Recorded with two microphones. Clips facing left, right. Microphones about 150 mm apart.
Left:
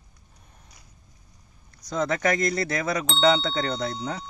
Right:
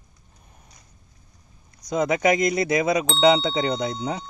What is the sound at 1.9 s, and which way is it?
Speech, 15° right (ahead or behind).